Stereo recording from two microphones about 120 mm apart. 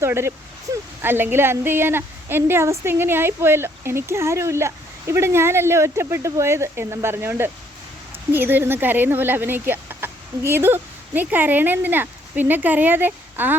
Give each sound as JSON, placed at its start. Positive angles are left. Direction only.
{"t": 0.0, "sound": "a woman's voice", "side_deg": -20}
{"t": 0.7, "sound": "a sound", "side_deg": -25}
{"t": 1.0, "sound": "a woman's voice", "side_deg": -15}